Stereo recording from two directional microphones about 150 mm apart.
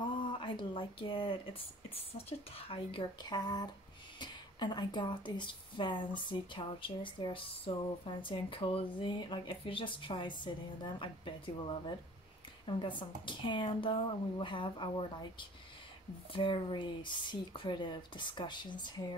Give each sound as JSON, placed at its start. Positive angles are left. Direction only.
{"t": 0.2, "sound": "speech", "side_deg": 35}